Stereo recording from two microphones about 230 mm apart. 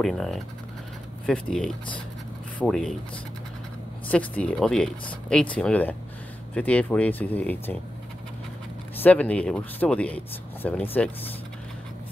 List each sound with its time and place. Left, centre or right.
0.0 s speech: centre
4.1 s speech: centre
9.0 s speech: centre